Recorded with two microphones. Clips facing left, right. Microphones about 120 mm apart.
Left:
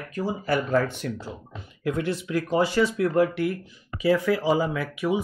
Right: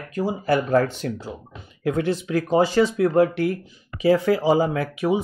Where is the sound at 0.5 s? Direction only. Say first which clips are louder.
Right 4 dB; 40° right (ahead or behind).